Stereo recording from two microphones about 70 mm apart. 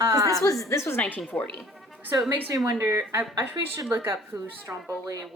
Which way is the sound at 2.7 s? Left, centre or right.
Right.